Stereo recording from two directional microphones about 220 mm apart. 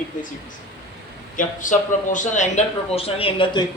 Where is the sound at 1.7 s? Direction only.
35° left (ahead or behind).